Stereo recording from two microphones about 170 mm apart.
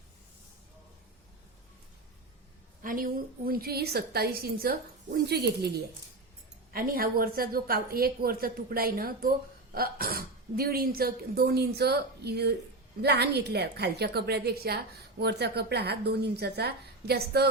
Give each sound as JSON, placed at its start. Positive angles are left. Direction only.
{"t": 2.8, "sound": "a woman's voice", "side_deg": -55}
{"t": 6.7, "sound": "a woman's voice", "side_deg": -60}